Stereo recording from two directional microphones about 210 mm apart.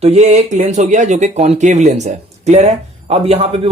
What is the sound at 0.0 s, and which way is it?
Speech, 30° right (ahead or behind).